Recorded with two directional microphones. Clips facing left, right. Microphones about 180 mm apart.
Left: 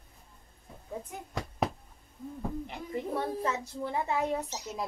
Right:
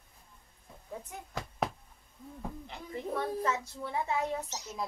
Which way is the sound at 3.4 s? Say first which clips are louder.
Left 1 dB; 35° left (ahead or behind).